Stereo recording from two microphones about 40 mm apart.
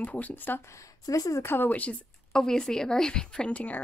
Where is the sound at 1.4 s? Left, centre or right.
Left.